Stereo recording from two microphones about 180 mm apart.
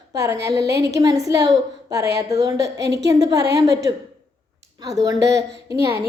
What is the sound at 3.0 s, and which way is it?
Speech, 20° right (ahead or behind).